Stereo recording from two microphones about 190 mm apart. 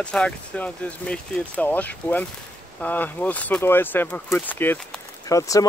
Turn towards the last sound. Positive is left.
turn(degrees=15)  # may be behind; listen again after turning